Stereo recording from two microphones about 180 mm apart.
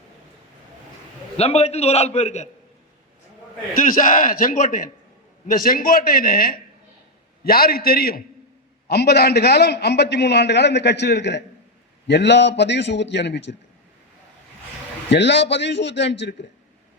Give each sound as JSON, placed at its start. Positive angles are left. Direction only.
{"t": 1.4, "sound": "a man's voice", "side_deg": 35}
{"t": 3.8, "sound": "a man's voice", "side_deg": 50}
{"t": 15.1, "sound": "a man's voice", "side_deg": 75}